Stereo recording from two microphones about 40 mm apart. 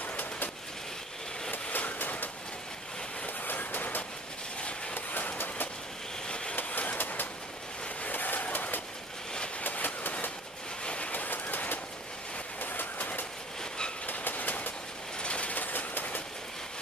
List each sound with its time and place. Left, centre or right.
0.0 s vehicle: left
1.5 s vehicle: left
3.4 s vehicle: left
4.9 s train: left
6.2 s vehicle: left
7.0 s vehicle: left
9.6 s train: left
10.8 s a sound: left
11.1 s train: left
15.2 s train: left
15.5 s train: left